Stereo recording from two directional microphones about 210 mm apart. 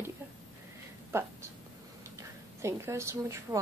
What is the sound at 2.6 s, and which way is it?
A woman's voice, 15° right (ahead or behind).